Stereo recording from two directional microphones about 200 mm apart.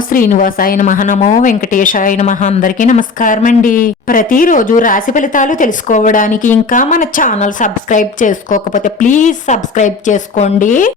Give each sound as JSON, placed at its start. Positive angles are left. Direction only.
{"t": 0.1, "sound": "a woman's voice", "side_deg": 45}